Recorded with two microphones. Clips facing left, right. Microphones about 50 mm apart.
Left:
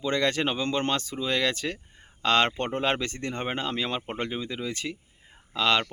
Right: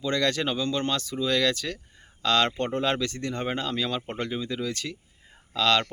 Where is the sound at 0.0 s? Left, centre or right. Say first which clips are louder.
Even; left.